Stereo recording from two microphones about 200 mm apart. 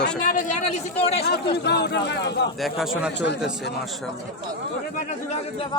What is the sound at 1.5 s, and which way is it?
Speech, 55° left (ahead or behind).